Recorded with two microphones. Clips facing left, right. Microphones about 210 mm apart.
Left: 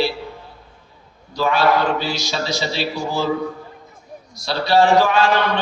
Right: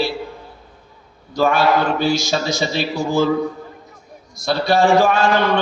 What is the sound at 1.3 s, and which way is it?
A man's voice, 50° right (ahead or behind).